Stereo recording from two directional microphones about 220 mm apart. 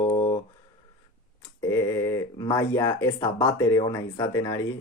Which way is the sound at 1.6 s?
15° left (ahead or behind).